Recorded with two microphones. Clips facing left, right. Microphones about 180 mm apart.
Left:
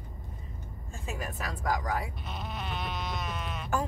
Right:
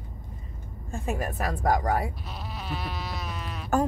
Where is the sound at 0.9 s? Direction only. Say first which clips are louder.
Right 8 dB; 55° right (ahead or behind).